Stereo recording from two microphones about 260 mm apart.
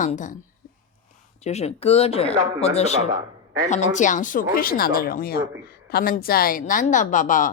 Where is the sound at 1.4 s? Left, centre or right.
Left.